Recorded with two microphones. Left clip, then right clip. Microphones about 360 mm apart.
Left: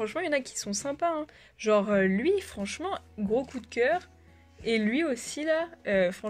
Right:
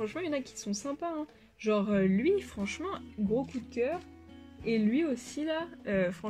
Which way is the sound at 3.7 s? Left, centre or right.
Left.